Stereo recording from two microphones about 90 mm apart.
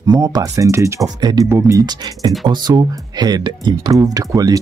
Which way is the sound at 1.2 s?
50° right (ahead or behind).